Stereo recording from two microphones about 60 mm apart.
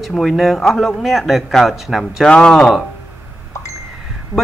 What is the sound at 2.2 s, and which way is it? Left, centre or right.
Speech, centre.